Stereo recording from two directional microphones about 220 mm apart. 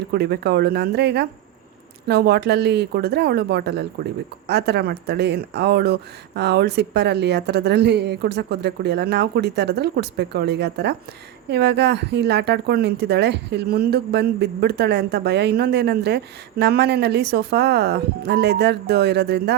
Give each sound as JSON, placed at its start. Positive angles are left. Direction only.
{"t": 0.1, "sound": "a woman's voice", "side_deg": -45}